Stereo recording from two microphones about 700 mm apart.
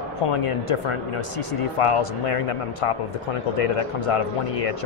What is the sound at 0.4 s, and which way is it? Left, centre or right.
Speech, left.